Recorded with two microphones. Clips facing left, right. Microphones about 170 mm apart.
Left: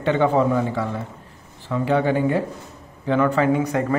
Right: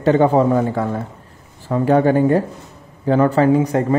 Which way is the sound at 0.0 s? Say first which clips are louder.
Right 5 dB; 40° right (ahead or behind).